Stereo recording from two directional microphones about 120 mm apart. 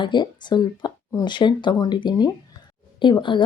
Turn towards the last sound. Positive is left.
turn(degrees=45)  # may be behind; listen again after turning